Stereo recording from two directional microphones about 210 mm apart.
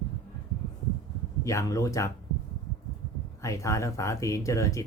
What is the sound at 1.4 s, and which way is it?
Speech, 15° left (ahead or behind).